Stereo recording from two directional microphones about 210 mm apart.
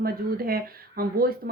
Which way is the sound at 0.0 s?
45° right (ahead or behind).